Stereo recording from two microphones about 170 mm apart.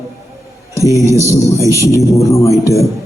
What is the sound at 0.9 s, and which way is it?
Speech, 20° left (ahead or behind).